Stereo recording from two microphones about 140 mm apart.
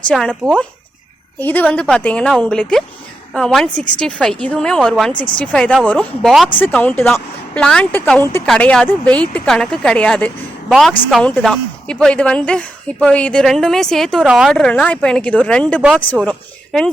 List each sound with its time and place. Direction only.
0.1 s speech: 5° left (ahead or behind)
5.1 s speech: 35° left (ahead or behind)
5.4 s speech: 10° left (ahead or behind)
6.2 s speech: centre (ahead or behind)
6.6 s speech: 15° left (ahead or behind)